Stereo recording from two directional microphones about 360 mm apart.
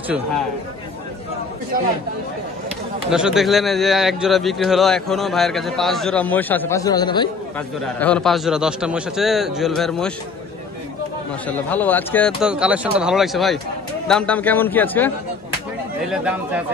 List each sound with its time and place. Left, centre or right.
3.1 s a man's voice: centre
11.4 s a man's voice: centre